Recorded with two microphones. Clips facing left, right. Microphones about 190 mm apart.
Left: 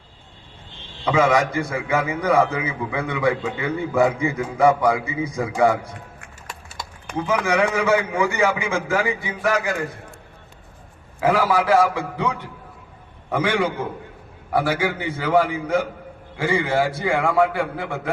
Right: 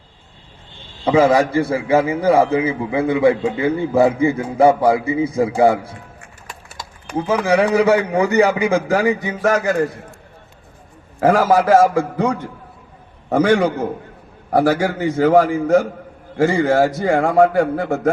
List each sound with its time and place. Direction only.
1.0 s a man's voice: 35° right (ahead or behind)
7.2 s a man's voice: 30° right (ahead or behind)
11.2 s a man's voice: 45° right (ahead or behind)